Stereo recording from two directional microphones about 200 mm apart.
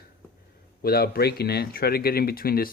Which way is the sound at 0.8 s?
50° left (ahead or behind).